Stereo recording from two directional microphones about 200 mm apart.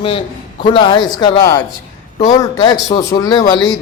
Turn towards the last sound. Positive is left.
turn(degrees=20)  # may be behind; listen again after turning